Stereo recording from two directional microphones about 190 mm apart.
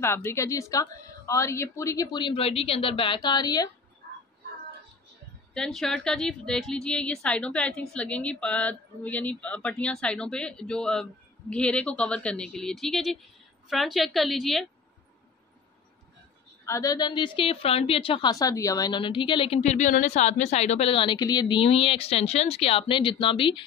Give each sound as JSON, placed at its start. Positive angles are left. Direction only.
{"t": 0.0, "sound": "a woman's voice", "side_deg": 15}
{"t": 5.5, "sound": "a woman's voice", "side_deg": 5}
{"t": 16.6, "sound": "a woman's voice", "side_deg": 15}